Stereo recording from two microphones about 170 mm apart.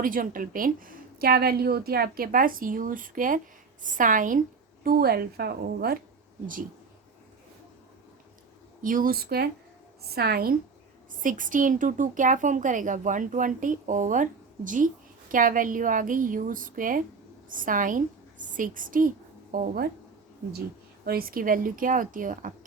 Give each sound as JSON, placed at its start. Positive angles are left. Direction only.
{"t": 0.0, "sound": "a woman's voice", "side_deg": -55}
{"t": 8.8, "sound": "a woman's voice", "side_deg": -55}
{"t": 11.2, "sound": "a woman's voice", "side_deg": -50}
{"t": 21.0, "sound": "a woman's voice", "side_deg": -60}